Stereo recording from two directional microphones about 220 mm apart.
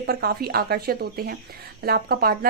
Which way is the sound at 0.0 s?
45° right (ahead or behind).